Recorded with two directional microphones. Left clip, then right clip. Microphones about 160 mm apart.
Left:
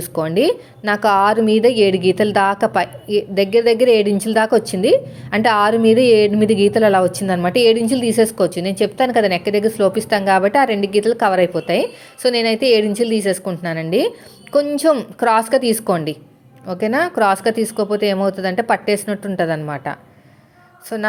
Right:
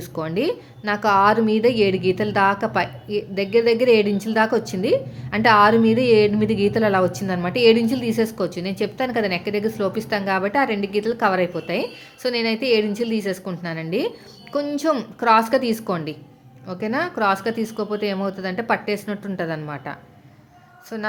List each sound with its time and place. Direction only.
0.0 s a woman's voice: 20° left (ahead or behind)